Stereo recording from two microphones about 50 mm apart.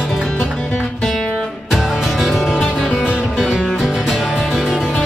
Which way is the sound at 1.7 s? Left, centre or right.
Centre.